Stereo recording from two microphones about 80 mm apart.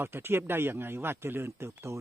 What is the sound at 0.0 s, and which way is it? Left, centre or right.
Speech, right.